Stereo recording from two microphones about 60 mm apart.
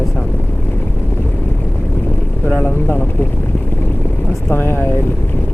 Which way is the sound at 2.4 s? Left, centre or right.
Left.